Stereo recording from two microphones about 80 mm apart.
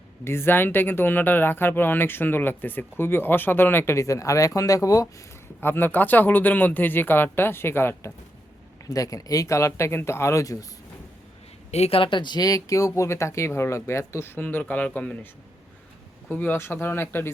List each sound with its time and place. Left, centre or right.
0.3 s speech: left
5.5 s speech: left
8.9 s speech: left
12.0 s speech: left; by 15.3 s centre
16.3 s speech: left